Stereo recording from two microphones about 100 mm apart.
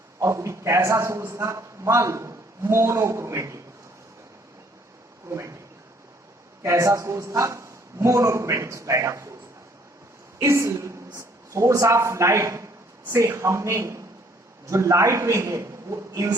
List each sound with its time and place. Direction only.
0.2 s a man's voice: 30° right (ahead or behind)
5.3 s a man's voice: 30° right (ahead or behind)
6.6 s a man's voice: 30° right (ahead or behind)
10.4 s a woman's voice: 30° right (ahead or behind)